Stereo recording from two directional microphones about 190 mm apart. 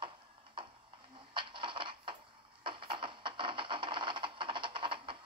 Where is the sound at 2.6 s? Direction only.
25° right (ahead or behind).